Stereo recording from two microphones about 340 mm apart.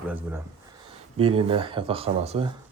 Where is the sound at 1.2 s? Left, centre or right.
Centre.